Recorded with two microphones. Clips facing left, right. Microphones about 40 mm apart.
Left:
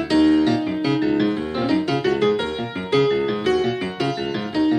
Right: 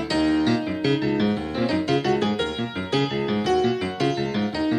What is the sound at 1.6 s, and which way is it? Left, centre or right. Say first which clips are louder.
Music: left 2 dB; left.